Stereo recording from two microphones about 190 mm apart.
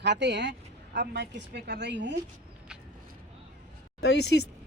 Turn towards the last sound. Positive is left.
turn(degrees=65)  # may be behind; listen again after turning